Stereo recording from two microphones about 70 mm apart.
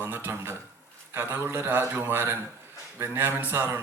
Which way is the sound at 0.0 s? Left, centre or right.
Right.